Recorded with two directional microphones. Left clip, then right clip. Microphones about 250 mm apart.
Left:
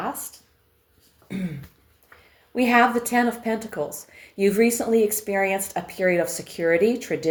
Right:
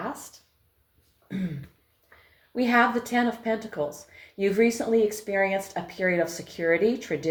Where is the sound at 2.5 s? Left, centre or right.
Left.